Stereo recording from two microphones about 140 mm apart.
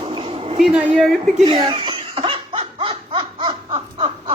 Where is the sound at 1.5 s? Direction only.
30° right (ahead or behind).